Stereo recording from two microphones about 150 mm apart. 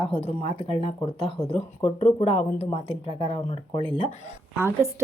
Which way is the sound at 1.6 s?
45° left (ahead or behind).